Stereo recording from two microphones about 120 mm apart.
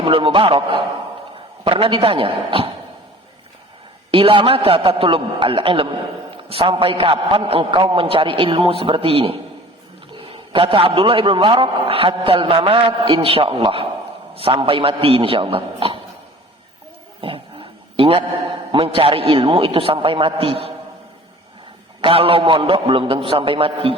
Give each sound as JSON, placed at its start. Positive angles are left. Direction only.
{"t": 0.0, "sound": "a man's voice", "side_deg": -45}
{"t": 4.1, "sound": "a man's voice", "side_deg": -50}
{"t": 17.2, "sound": "dog", "side_deg": -50}
{"t": 18.7, "sound": "a man's voice", "side_deg": -50}
{"t": 22.0, "sound": "a man's voice", "side_deg": -50}